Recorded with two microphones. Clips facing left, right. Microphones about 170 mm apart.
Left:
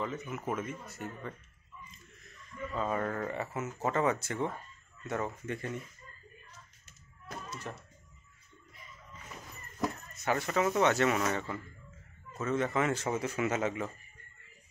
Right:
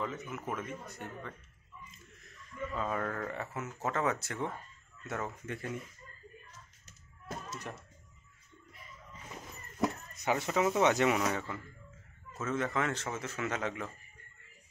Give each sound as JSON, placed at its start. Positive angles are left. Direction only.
{"t": 0.0, "sound": "speech", "side_deg": 0}
{"t": 2.7, "sound": "speech", "side_deg": 5}
{"t": 6.9, "sound": "a sound", "side_deg": -40}
{"t": 10.2, "sound": "speech", "side_deg": -15}